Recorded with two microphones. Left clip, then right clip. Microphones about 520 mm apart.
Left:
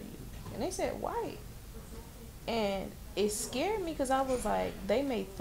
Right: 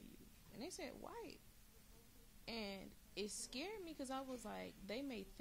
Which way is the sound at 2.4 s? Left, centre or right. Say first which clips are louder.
Left 17 dB; right.